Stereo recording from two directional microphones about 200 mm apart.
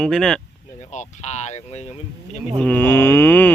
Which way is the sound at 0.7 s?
35° left (ahead or behind).